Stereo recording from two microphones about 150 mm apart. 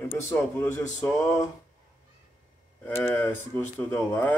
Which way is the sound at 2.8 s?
15° left (ahead or behind).